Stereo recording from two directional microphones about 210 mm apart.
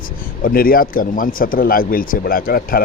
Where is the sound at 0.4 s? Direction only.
45° left (ahead or behind).